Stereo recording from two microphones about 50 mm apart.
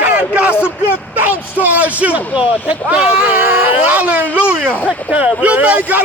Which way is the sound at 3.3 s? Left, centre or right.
Right.